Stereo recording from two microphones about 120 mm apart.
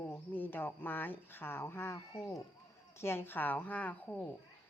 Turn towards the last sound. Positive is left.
turn(degrees=15)  # may be behind; listen again after turning